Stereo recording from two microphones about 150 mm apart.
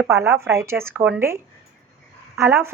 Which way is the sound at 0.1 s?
15° right (ahead or behind).